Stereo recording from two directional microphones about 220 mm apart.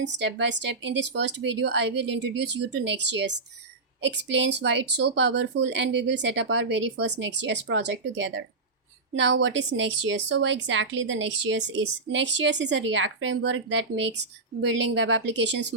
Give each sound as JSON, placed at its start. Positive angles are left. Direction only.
{"t": 0.0, "sound": "a woman's voice", "side_deg": -55}